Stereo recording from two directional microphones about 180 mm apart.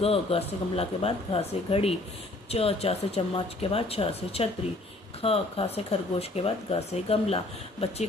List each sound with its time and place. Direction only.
0.0 s speech: 35° left (ahead or behind)